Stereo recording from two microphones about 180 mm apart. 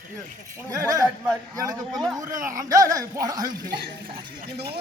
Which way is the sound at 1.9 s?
Centre (ahead or behind).